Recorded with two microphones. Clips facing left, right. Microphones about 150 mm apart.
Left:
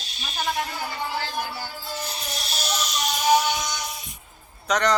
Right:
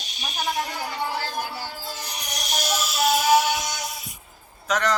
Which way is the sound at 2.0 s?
15° right (ahead or behind).